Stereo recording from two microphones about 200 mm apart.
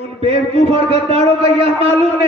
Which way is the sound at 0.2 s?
30° right (ahead or behind).